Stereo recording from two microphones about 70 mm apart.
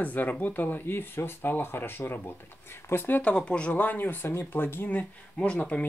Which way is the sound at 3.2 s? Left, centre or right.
Centre.